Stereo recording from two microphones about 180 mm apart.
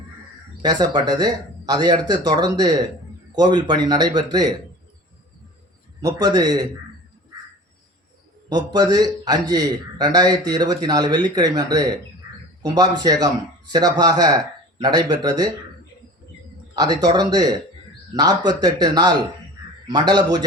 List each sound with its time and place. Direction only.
0.6 s a man's voice: 20° right (ahead or behind)
6.0 s a man's voice: 20° right (ahead or behind)
8.4 s a man's voice: 20° right (ahead or behind)
13.0 s a man's voice: 20° right (ahead or behind)
16.7 s a man's voice: 20° right (ahead or behind)